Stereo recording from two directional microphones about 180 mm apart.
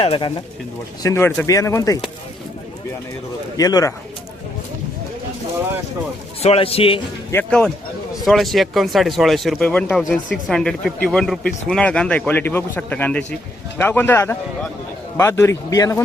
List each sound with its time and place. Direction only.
0.0 s a man's voice: 30° left (ahead or behind)
1.0 s speech: 15° left (ahead or behind)
3.6 s speech: 20° left (ahead or behind)
6.4 s a man's voice: 35° left (ahead or behind)
7.3 s speech: 10° left (ahead or behind)